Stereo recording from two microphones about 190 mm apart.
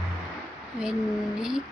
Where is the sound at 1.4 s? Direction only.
5° right (ahead or behind).